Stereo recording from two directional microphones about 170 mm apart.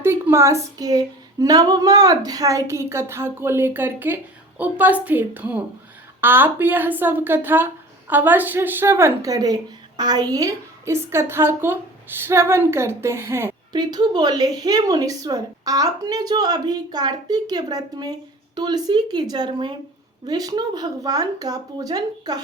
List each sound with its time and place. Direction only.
0.0 s a woman's voice: 15° right (ahead or behind)